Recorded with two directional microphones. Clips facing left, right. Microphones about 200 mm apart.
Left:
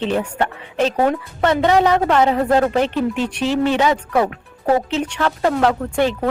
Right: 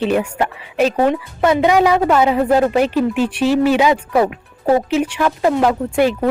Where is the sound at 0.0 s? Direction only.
10° right (ahead or behind).